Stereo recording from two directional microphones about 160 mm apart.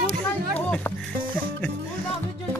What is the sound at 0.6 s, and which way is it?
Music, 10° left (ahead or behind).